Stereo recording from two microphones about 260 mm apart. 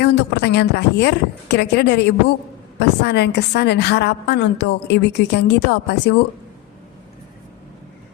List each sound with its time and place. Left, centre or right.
0.0 s a woman's voice: left